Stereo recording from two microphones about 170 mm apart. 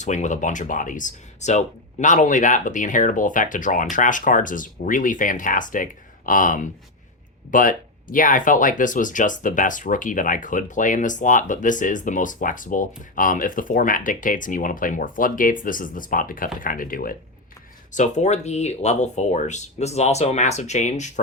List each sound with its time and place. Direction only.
0.0 s speech: 45° left (ahead or behind)
17.9 s speech: 45° left (ahead or behind)